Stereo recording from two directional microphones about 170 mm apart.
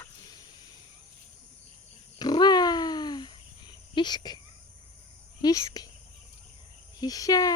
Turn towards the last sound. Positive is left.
turn(degrees=20)  # may be behind; listen again after turning